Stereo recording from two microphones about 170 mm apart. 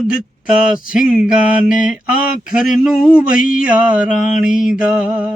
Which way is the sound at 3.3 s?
55° left (ahead or behind).